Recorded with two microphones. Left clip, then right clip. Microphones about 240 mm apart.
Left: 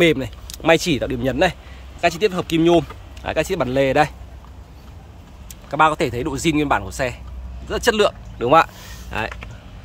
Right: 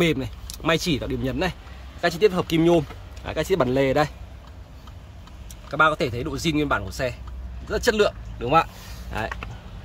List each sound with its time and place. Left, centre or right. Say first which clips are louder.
0.0 s speech: left 6 dB; centre
5.7 s speech: left 3 dB; centre